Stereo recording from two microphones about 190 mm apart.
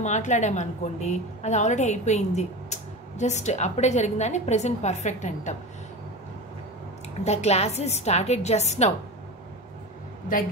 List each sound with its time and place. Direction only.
0.0 s a woman's voice: 40° left (ahead or behind)
7.2 s a woman's voice: 35° left (ahead or behind)